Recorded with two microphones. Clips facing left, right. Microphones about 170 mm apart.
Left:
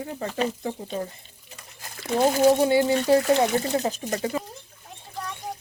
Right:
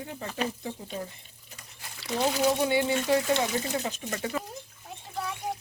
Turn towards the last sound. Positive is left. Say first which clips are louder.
# right 1 dB
turn(degrees=-5)  # may be behind; listen again after turning